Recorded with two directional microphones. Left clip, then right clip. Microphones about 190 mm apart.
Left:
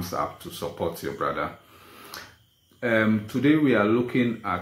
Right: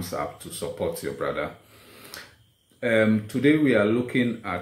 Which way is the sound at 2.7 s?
5° right (ahead or behind).